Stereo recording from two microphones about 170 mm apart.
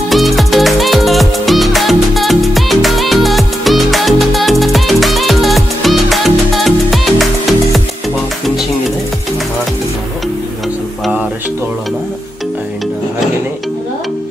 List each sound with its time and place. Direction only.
0.1 s music: centre (ahead or behind)